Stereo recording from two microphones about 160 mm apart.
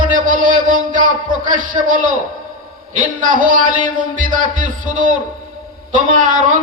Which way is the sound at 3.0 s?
60° right (ahead or behind).